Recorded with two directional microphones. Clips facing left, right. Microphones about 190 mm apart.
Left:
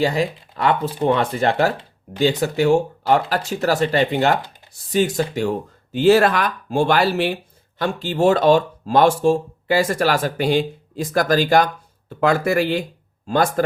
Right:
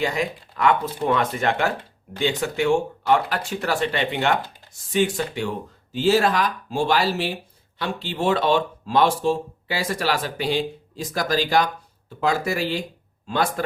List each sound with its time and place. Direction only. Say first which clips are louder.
0.0 s speech: left 5 dB; 35° left (ahead or behind); by 7.3 s 60° left (ahead or behind)
7.8 s speech: left 7 dB; 45° left (ahead or behind)
13.2 s speech: left 5 dB; 45° left (ahead or behind)